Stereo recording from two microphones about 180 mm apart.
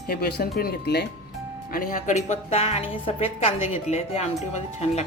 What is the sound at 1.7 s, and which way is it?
A woman's voice, 50° left (ahead or behind).